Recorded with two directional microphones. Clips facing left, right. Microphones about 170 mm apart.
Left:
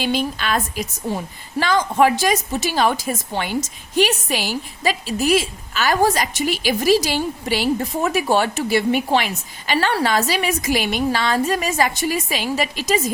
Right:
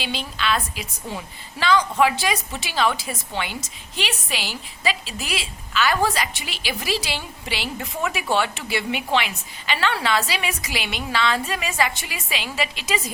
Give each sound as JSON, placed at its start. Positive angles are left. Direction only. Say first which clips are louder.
{"t": 0.0, "sound": "a woman's voice", "louder": "left 6 dB", "side_deg": 45}